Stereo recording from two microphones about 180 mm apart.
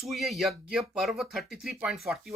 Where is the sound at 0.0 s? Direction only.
Centre (ahead or behind).